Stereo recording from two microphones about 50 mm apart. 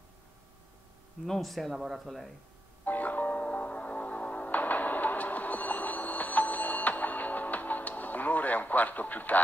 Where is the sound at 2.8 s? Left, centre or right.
Left.